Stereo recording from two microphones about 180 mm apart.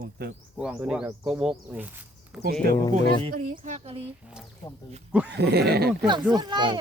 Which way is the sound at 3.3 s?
50° right (ahead or behind).